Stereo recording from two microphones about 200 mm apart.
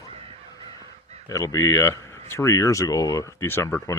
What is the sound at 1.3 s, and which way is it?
Speech, 15° left (ahead or behind).